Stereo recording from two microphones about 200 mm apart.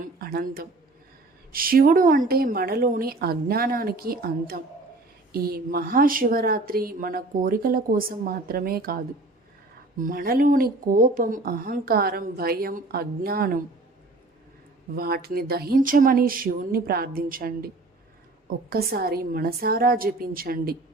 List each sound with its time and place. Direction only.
0.0 s speech: 50° right (ahead or behind)
10.0 s speech: 45° right (ahead or behind)
14.9 s speech: 50° right (ahead or behind)
18.7 s speech: 50° right (ahead or behind)